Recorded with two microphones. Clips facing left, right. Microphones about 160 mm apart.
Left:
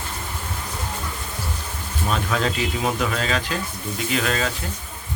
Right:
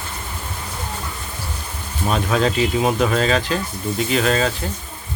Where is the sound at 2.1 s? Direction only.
25° right (ahead or behind).